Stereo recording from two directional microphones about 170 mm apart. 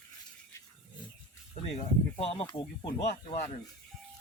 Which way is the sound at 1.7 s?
35° left (ahead or behind).